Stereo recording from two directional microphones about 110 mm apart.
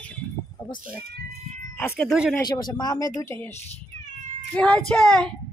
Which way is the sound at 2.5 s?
40° left (ahead or behind).